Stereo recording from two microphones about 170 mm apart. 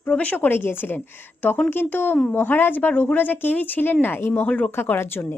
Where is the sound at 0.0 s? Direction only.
10° left (ahead or behind).